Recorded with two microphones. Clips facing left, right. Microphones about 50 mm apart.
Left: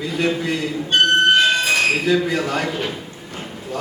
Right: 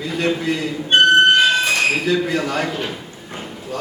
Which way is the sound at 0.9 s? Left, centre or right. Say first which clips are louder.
Right 3 dB; right.